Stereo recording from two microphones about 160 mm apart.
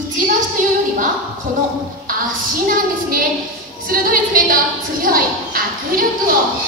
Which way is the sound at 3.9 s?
60° right (ahead or behind).